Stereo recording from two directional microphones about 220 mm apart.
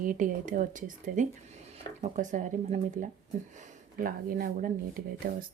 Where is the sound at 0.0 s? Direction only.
35° right (ahead or behind).